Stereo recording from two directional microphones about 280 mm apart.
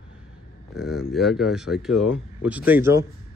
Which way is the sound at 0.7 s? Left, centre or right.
Centre.